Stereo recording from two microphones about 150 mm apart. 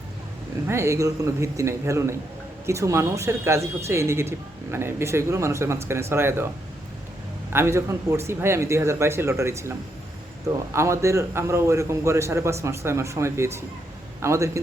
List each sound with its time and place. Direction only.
0.7 s a man's voice: 20° right (ahead or behind)
7.5 s a man's voice: 15° right (ahead or behind)